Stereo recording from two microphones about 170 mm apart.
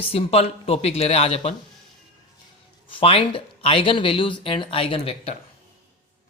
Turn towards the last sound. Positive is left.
turn(degrees=35)  # may be behind; listen again after turning